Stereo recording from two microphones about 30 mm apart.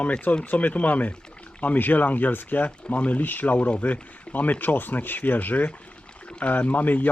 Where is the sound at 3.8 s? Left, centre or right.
Left.